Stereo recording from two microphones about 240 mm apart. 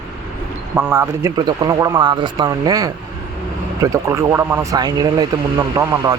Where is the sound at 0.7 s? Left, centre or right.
Centre.